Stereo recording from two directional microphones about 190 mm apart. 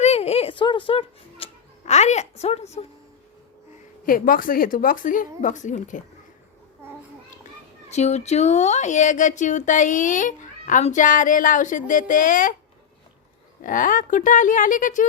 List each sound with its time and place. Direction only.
0.0 s a child's voice: 35° left (ahead or behind)
4.0 s a woman's voice: 50° left (ahead or behind)
7.9 s speech: 35° left (ahead or behind)
13.6 s a woman's voice: 45° left (ahead or behind)